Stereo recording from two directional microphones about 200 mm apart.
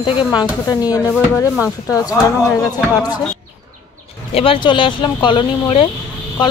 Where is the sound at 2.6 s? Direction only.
20° left (ahead or behind).